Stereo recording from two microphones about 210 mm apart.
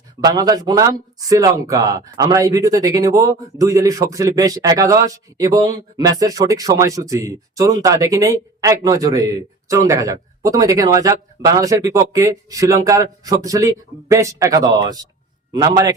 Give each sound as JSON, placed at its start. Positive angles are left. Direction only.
{"t": 0.2, "sound": "speech", "side_deg": -20}